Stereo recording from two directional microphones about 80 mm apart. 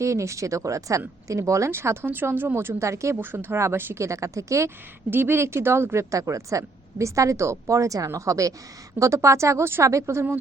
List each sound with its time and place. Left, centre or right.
0.0 s speech: right
5.1 s speech: right